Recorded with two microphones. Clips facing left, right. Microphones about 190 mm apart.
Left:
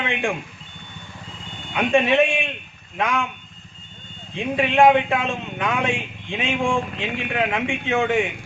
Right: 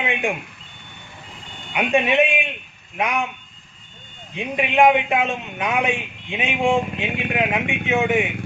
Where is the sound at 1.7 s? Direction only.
15° right (ahead or behind).